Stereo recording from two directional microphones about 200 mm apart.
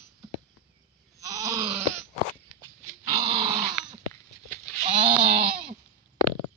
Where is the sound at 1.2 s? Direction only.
15° right (ahead or behind).